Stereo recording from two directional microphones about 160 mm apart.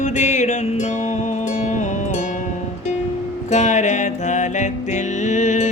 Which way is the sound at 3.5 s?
45° left (ahead or behind).